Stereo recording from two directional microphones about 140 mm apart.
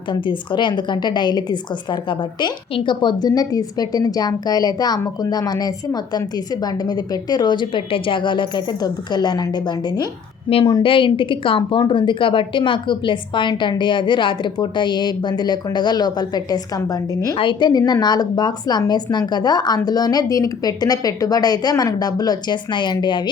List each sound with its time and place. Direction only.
0.1 s a woman's voice: 35° left (ahead or behind)
17.3 s speech: 35° left (ahead or behind)